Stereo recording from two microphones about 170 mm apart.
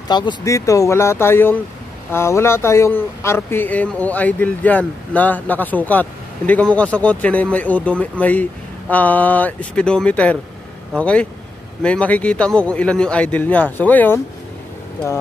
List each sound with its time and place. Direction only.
0.1 s speech: 25° left (ahead or behind)